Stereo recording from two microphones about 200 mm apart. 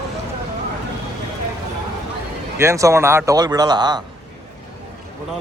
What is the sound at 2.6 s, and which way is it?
Speech, 15° right (ahead or behind).